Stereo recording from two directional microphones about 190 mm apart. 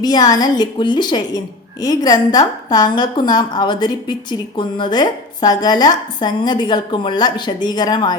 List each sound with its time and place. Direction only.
0.0 s a woman's voice: 20° left (ahead or behind)